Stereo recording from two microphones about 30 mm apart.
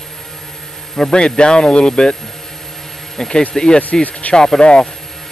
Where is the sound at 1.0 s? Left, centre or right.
Left.